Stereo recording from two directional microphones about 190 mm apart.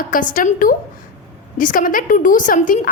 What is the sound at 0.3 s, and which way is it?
A woman's voice, 45° left (ahead or behind).